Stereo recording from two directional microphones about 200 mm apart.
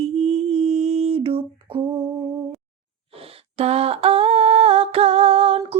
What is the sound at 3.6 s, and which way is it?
Humming, 30° right (ahead or behind).